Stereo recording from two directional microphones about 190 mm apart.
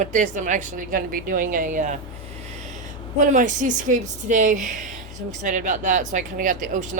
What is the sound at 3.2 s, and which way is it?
A woman's voice, 40° right (ahead or behind).